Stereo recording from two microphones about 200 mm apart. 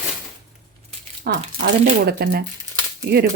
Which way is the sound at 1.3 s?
50° right (ahead or behind).